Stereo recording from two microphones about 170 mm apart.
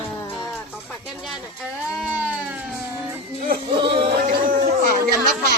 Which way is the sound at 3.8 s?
30° right (ahead or behind).